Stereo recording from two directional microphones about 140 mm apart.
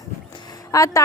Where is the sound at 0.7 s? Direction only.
25° left (ahead or behind).